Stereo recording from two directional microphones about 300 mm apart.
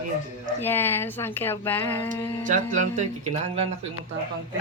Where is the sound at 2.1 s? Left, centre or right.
Right.